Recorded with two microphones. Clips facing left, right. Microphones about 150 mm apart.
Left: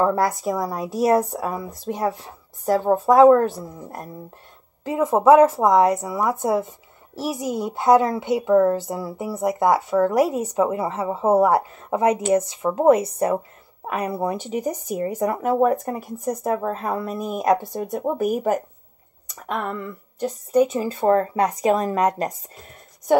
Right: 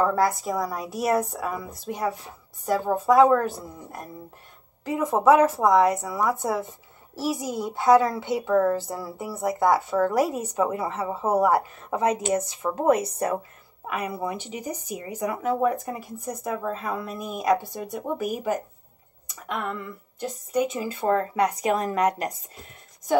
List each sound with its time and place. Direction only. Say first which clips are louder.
0.0 s speech: left 2 dB; 30° left (ahead or behind)
4.8 s a child's voice: left 4 dB; 25° left (ahead or behind)
14.2 s speech: left 6 dB; 45° left (ahead or behind)
20.2 s speech: left 7 dB; 40° left (ahead or behind)